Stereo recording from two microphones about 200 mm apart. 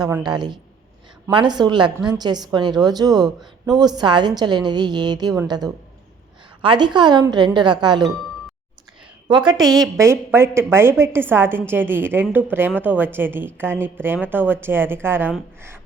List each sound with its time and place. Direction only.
0.0 s a woman's voice: 20° right (ahead or behind)
9.5 s a woman's voice: 20° right (ahead or behind)